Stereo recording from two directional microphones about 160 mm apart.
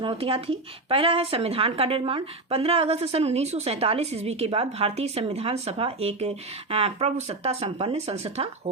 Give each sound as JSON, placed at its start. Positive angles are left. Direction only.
{"t": 0.0, "sound": "speech", "side_deg": -35}